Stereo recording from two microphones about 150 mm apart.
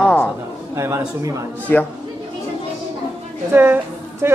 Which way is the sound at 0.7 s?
20° right (ahead or behind).